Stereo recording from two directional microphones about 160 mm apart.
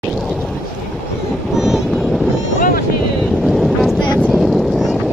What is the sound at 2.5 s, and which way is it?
Boat, 55° left (ahead or behind).